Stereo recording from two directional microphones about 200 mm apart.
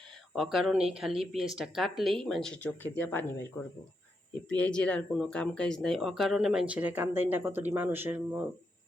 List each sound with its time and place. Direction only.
0.3 s speech: centre (ahead or behind)
4.4 s speech: 5° left (ahead or behind); by 8.4 s 10° right (ahead or behind)